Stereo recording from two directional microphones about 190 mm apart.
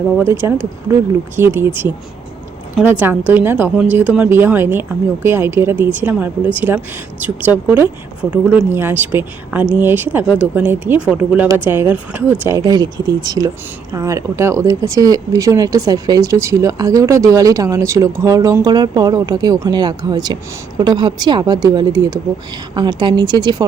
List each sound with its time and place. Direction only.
0.2 s speech: 15° right (ahead or behind)
3.0 s speech: 10° right (ahead or behind)